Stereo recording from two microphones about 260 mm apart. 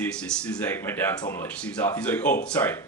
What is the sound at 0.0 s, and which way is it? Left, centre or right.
A woman's voice, centre.